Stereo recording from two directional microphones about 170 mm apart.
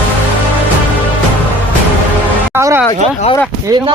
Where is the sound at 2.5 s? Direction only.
15° right (ahead or behind).